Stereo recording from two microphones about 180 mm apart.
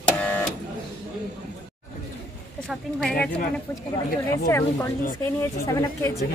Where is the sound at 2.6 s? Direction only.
5° left (ahead or behind).